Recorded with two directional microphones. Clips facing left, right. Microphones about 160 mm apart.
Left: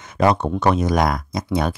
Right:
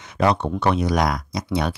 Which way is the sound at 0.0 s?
45° left (ahead or behind).